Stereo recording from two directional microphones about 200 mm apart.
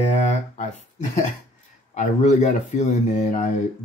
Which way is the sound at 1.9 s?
35° left (ahead or behind).